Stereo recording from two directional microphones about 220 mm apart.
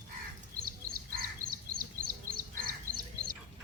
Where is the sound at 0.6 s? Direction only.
40° right (ahead or behind).